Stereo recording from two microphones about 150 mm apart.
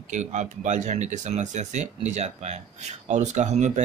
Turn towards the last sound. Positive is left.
turn(degrees=-50)  # may be behind; listen again after turning